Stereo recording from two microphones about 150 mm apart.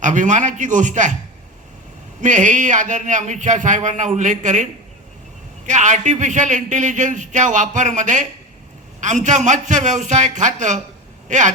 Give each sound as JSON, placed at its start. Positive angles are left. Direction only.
{"t": 0.0, "sound": "speech", "side_deg": -55}
{"t": 2.2, "sound": "a man's voice", "side_deg": -55}